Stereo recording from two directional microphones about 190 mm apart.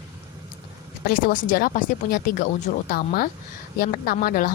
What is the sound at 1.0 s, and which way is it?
A woman's voice, 45° left (ahead or behind).